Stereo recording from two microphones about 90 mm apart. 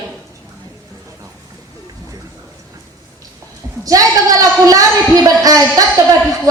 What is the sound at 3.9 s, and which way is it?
A woman's voice, 40° right (ahead or behind).